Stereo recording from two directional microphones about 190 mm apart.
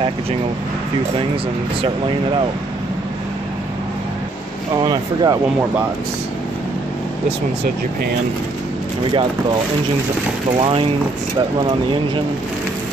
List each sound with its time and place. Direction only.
4.7 s speech: 20° right (ahead or behind)
10.6 s speech: 30° right (ahead or behind)